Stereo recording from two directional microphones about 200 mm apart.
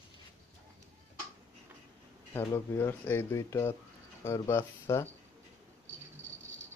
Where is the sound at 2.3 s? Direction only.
15° left (ahead or behind).